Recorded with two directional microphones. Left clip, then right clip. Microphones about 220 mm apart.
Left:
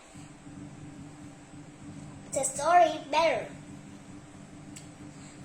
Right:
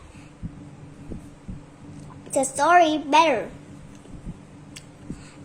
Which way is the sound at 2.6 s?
50° right (ahead or behind).